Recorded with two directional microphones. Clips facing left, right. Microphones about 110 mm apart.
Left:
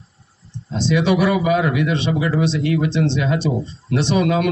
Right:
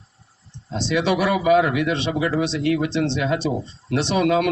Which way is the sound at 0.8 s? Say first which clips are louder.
Left 3 dB; 80° right.